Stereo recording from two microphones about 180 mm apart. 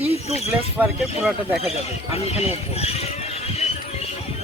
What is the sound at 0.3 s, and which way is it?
Speech, 35° left (ahead or behind).